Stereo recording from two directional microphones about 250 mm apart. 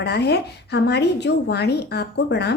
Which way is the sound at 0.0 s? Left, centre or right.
Left.